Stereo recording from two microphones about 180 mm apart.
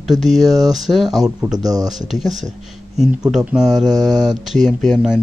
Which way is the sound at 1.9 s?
Centre (ahead or behind).